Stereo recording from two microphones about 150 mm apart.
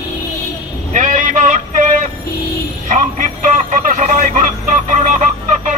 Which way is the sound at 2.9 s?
60° right (ahead or behind).